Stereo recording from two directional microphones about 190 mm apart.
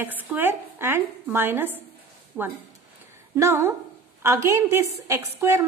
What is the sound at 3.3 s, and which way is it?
A woman's voice, 15° right (ahead or behind).